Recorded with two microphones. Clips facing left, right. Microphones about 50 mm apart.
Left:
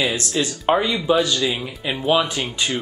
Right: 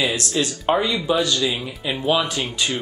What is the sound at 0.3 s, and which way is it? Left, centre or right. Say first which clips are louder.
Speech: left 1 dB; centre.